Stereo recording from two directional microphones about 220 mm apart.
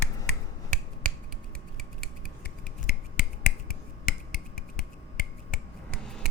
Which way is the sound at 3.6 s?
40° left (ahead or behind).